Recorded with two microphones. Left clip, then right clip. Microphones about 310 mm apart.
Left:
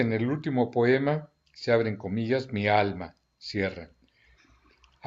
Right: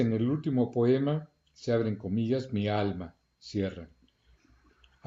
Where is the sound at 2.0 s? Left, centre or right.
Left.